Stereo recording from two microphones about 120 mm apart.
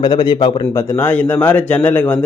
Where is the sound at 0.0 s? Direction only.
40° left (ahead or behind).